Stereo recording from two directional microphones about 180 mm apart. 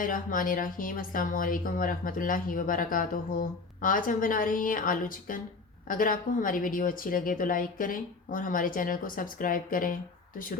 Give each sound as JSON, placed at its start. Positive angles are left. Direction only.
{"t": 0.0, "sound": "speech", "side_deg": 50}